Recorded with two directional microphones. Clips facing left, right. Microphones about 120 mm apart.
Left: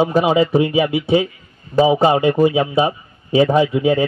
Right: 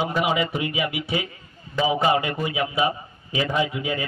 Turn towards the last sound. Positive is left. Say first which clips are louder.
# left 10 dB
turn(degrees=30)  # may be behind; listen again after turning